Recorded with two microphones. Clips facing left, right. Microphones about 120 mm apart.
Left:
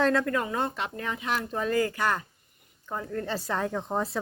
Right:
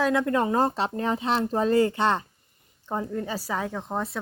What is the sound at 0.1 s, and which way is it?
Speech, 15° right (ahead or behind).